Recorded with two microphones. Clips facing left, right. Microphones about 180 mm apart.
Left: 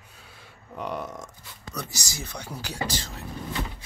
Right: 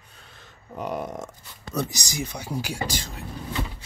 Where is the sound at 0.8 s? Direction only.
45° right (ahead or behind).